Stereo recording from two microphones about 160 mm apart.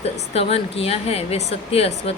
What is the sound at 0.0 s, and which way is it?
A woman's voice, 40° left (ahead or behind).